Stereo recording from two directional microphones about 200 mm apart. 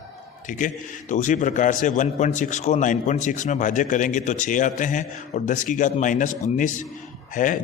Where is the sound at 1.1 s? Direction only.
40° left (ahead or behind).